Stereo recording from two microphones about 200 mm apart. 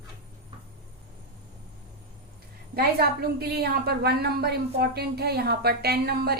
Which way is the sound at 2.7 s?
50° right (ahead or behind).